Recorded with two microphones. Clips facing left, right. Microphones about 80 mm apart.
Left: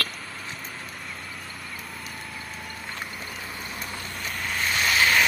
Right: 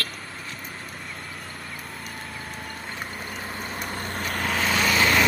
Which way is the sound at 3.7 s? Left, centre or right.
Right.